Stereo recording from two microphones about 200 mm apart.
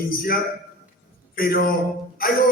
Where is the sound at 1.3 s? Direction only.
45° left (ahead or behind).